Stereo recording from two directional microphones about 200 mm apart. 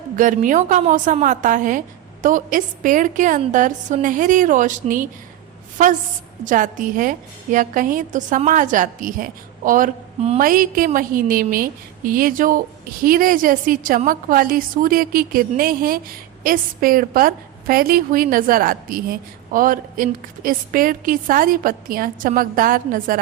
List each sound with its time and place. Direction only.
0.2 s a woman's voice: 40° right (ahead or behind)
6.4 s a woman's voice: 40° right (ahead or behind)